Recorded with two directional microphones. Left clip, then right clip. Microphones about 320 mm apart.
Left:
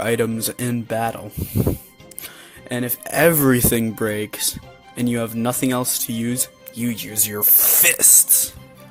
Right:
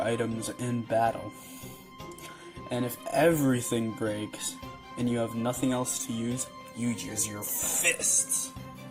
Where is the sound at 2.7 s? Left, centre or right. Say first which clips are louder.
Left 6 dB; left.